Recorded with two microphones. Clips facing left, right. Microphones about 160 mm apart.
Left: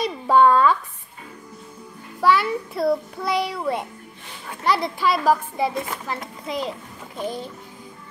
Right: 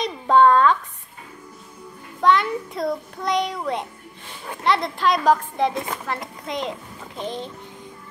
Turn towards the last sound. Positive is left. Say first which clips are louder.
# left 1 dB
turn(degrees=10)  # may be behind; listen again after turning